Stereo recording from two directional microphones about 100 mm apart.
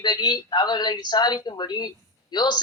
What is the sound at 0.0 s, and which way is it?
A man's voice, 45° left (ahead or behind).